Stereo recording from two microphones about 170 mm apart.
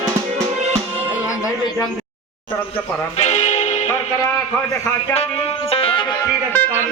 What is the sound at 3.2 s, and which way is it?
Music, 45° left (ahead or behind).